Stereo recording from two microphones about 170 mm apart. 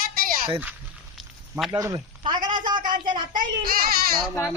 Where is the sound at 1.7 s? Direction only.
20° right (ahead or behind).